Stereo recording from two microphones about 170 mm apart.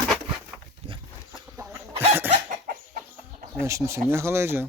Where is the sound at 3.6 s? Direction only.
15° right (ahead or behind).